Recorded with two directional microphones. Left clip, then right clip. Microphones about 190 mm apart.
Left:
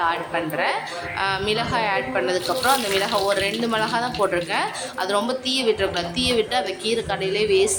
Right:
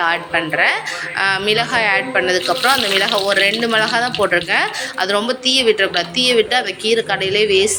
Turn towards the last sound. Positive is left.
turn(degrees=0)  # may be behind; listen again after turning